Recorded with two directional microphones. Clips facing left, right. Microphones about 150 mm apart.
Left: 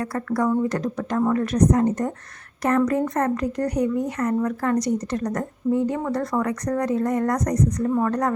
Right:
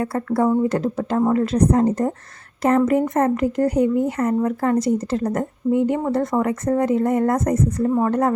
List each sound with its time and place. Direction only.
0.0 s a woman's voice: 25° right (ahead or behind)